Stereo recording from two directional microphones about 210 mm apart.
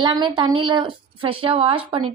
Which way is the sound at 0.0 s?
20° right (ahead or behind).